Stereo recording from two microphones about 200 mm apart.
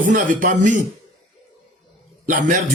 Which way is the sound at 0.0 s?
40° right (ahead or behind).